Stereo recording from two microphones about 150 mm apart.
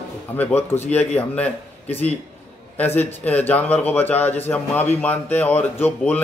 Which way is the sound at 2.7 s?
15° left (ahead or behind).